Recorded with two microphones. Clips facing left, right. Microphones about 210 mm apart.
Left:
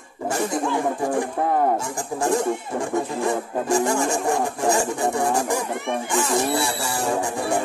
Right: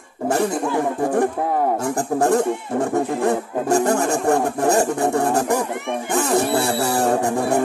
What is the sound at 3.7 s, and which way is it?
Music, 60° right (ahead or behind).